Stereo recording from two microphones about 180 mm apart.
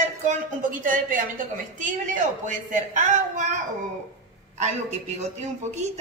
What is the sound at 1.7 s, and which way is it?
A woman's voice, 45° right (ahead or behind).